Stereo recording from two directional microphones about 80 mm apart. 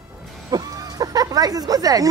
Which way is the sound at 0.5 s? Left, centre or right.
Right.